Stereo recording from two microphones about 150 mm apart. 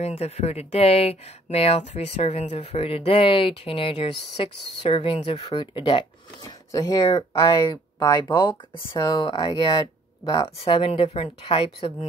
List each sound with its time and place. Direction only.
0.0 s speech: 40° left (ahead or behind); by 8.2 s 25° left (ahead or behind)
8.3 s speech: 15° left (ahead or behind)
8.9 s speech: 25° left (ahead or behind)